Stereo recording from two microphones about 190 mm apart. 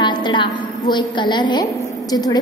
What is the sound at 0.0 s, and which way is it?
A woman's voice, 25° left (ahead or behind).